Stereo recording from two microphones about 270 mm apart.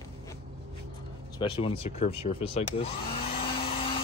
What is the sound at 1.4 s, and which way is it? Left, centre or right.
Speech, centre.